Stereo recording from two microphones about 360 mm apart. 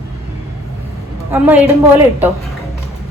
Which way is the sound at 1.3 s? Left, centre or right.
Centre.